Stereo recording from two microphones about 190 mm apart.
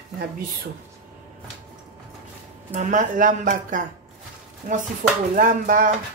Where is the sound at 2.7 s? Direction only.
40° right (ahead or behind).